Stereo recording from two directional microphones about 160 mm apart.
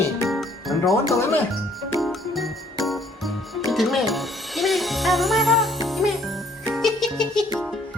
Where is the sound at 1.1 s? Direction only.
15° left (ahead or behind).